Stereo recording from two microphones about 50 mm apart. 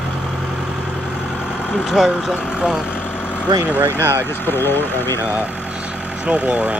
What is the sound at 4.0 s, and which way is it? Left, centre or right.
Speech, right.